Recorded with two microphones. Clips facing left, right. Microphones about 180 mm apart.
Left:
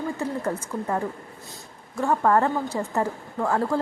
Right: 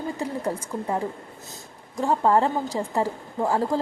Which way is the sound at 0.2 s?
15° right (ahead or behind).